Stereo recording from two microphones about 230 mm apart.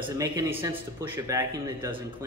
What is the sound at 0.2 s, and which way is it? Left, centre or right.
Speech, centre.